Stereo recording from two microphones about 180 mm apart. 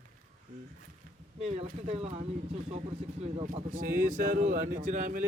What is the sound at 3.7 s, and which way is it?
A man's voice, 50° right (ahead or behind).